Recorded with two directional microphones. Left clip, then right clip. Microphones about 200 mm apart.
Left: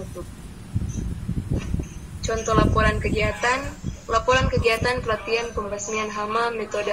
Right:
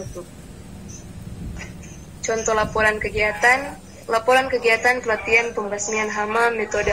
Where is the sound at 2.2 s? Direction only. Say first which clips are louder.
Right 1 dB; 20° right (ahead or behind).